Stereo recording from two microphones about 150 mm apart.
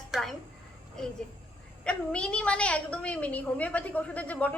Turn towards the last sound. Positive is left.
turn(degrees=10)  # may be behind; listen again after turning